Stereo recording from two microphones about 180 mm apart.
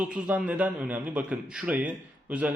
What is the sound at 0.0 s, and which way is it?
A man's voice, 5° right (ahead or behind).